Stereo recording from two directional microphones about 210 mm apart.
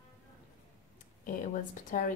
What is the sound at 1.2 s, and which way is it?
Speech, 40° left (ahead or behind).